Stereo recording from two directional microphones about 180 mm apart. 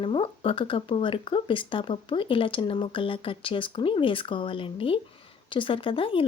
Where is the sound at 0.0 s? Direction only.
30° left (ahead or behind).